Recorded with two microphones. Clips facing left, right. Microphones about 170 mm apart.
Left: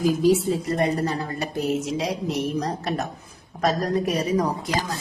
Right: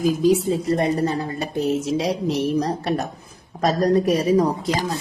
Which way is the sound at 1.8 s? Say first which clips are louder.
Right 4 dB; 30° right (ahead or behind).